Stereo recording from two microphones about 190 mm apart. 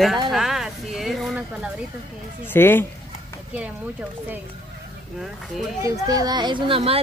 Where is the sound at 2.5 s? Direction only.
10° left (ahead or behind).